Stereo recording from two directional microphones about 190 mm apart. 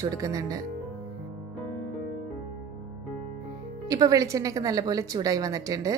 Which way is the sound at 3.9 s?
20° right (ahead or behind).